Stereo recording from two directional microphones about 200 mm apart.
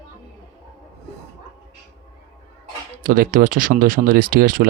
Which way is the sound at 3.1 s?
45° right (ahead or behind).